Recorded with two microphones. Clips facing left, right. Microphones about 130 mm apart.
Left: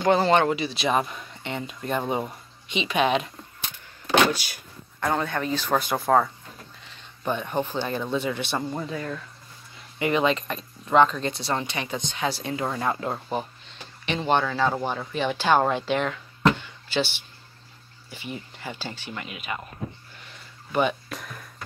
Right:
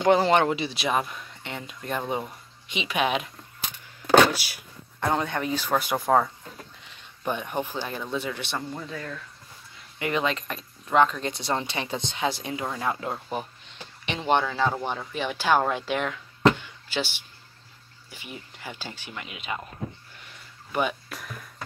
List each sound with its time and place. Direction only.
0.0 s speech: 15° right (ahead or behind)
0.8 s speech: centre (ahead or behind)
4.3 s speech: 5° right (ahead or behind)
5.0 s speech: 20° right (ahead or behind); by 8.5 s centre (ahead or behind)
8.5 s speech: 20° left (ahead or behind)
9.9 s speech: centre (ahead or behind); by 12.6 s 15° right (ahead or behind)
12.7 s speech: centre (ahead or behind)
14.0 s speech: 20° right (ahead or behind)
20.7 s speech: 5° right (ahead or behind)